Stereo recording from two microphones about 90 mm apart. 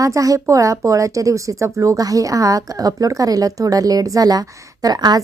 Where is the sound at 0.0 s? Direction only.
40° right (ahead or behind).